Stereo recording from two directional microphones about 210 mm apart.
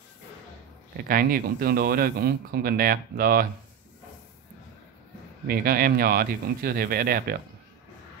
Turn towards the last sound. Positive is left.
turn(degrees=-45)  # may be behind; listen again after turning